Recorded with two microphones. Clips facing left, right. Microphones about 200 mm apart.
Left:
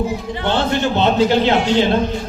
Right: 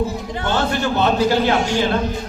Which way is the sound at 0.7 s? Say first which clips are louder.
Left 2 dB; 20° left (ahead or behind).